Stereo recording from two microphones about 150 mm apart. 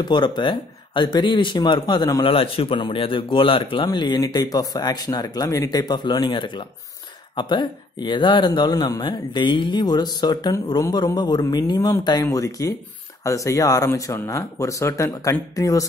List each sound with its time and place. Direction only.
0.0 s a man's voice: 30° left (ahead or behind)
2.3 s a man's voice: 40° left (ahead or behind); by 15.9 s 20° left (ahead or behind)